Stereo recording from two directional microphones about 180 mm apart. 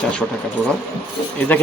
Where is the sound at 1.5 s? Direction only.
10° left (ahead or behind).